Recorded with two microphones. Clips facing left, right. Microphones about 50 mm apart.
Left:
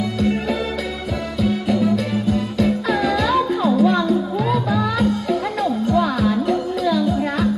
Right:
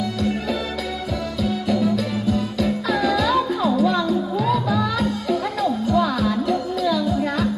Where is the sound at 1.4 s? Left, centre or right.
Left.